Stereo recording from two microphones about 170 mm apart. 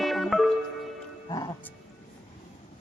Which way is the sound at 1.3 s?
25° left (ahead or behind).